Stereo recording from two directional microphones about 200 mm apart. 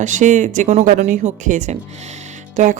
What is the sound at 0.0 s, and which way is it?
Speech, 35° right (ahead or behind).